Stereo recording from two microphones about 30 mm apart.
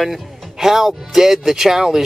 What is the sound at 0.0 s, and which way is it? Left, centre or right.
Speech, centre.